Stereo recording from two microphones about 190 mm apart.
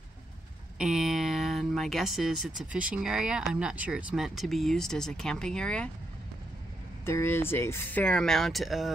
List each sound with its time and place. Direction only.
0.7 s speech: 5° right (ahead or behind)
7.1 s speech: 10° left (ahead or behind)